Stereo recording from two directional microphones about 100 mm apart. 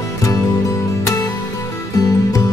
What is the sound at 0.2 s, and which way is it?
Music, 35° left (ahead or behind).